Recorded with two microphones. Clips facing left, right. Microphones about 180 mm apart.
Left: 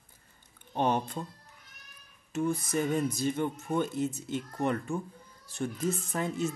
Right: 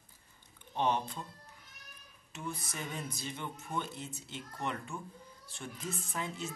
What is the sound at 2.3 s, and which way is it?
Speech, 45° left (ahead or behind).